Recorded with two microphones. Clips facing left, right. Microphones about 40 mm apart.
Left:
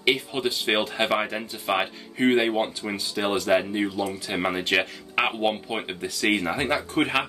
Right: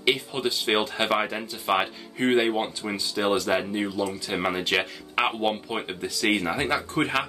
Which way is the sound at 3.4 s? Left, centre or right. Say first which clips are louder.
Left 3 dB; centre.